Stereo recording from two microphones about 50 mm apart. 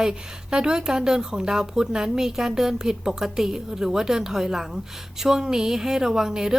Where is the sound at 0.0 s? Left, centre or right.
Centre.